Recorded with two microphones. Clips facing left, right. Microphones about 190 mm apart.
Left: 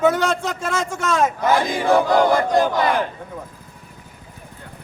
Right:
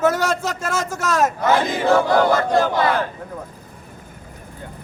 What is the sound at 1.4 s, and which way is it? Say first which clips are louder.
Battle cry: even; 15° left (ahead or behind).